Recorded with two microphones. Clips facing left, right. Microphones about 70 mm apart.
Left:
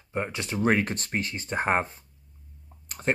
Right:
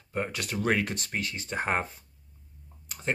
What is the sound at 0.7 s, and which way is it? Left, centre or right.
Speech, left.